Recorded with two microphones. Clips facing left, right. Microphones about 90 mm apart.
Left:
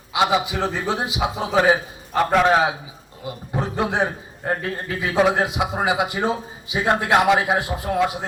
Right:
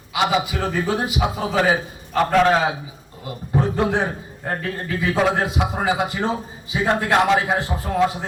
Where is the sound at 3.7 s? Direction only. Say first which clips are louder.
Right 1 dB; 15° left (ahead or behind).